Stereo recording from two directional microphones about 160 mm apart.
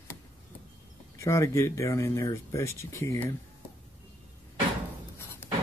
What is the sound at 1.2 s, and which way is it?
Speech, 20° left (ahead or behind).